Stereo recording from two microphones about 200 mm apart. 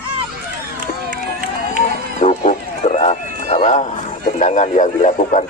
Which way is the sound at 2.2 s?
35° left (ahead or behind).